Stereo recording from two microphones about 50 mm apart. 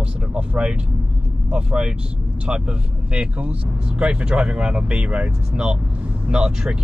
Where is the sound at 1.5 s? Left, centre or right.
Centre.